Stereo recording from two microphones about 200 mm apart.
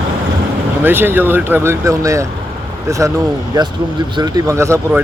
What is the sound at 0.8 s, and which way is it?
Speech, 10° right (ahead or behind).